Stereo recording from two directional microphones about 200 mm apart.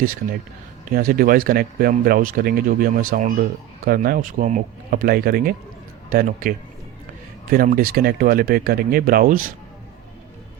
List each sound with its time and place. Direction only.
0.9 s speech: 45° right (ahead or behind)
7.5 s speech: 45° right (ahead or behind)